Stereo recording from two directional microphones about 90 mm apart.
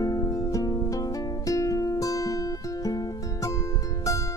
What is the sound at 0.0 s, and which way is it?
Music, 45° left (ahead or behind).